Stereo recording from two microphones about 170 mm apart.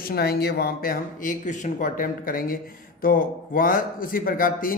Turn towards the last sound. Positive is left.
turn(degrees=55)  # may be behind; listen again after turning